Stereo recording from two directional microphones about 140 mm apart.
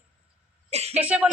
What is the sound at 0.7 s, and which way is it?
Speech, 50° right (ahead or behind).